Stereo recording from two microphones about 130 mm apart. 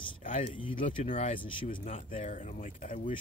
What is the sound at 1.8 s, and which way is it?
Speech, 60° left (ahead or behind).